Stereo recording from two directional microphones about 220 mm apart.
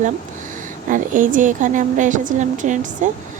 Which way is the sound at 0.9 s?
35° right (ahead or behind).